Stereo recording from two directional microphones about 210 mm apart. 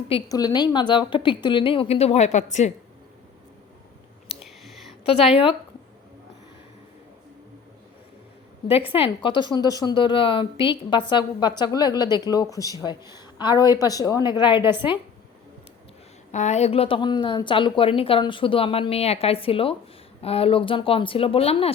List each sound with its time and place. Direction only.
0.1 s a woman's voice: 20° left (ahead or behind); by 2.7 s 35° left (ahead or behind)
4.3 s whispering: centre (ahead or behind)
8.6 s a woman's voice: 25° left (ahead or behind)
16.3 s a woman's voice: 35° left (ahead or behind)